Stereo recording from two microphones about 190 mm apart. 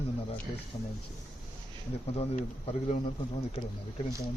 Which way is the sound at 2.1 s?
30° left (ahead or behind).